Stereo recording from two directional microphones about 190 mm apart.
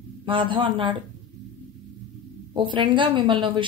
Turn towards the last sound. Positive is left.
turn(degrees=-25)  # may be behind; listen again after turning